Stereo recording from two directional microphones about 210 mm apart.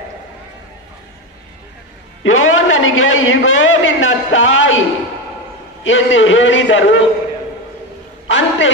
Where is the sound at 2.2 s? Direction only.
75° left (ahead or behind).